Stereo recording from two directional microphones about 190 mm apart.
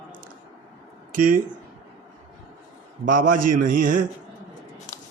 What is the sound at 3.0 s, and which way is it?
Speech, 45° right (ahead or behind).